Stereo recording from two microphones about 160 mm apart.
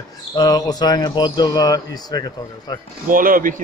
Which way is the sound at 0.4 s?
25° left (ahead or behind).